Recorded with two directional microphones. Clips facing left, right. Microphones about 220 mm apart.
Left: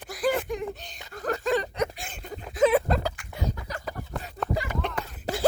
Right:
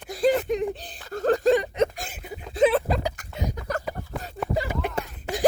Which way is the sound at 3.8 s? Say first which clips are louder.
Right 2 dB; 5° right (ahead or behind).